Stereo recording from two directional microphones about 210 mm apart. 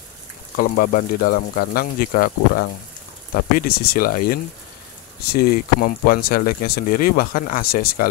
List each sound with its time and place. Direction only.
0.6 s speech: 45° left (ahead or behind)